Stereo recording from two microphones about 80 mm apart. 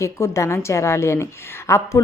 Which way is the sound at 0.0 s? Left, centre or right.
Left.